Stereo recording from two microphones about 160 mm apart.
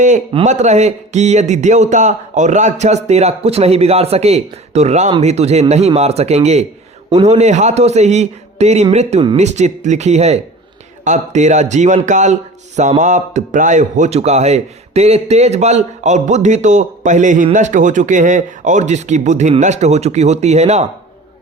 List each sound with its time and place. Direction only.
0.4 s speech: 45° right (ahead or behind)
7.1 s a man's voice: 25° right (ahead or behind)
7.3 s speech: 45° right (ahead or behind)